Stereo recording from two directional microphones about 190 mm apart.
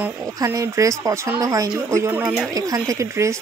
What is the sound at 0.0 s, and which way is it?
Speech, 15° right (ahead or behind).